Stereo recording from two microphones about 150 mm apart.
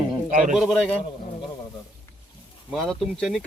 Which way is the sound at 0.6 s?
Centre (ahead or behind).